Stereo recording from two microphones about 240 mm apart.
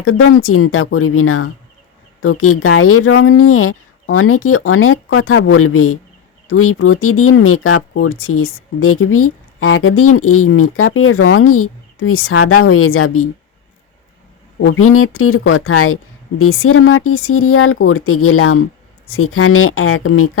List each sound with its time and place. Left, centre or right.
0.0 s speech: left
14.8 s speech: left